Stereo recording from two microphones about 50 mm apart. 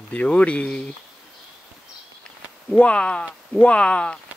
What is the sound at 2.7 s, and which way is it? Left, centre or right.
Speech, left.